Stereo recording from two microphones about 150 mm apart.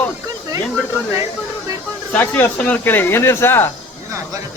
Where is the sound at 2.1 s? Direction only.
10° left (ahead or behind).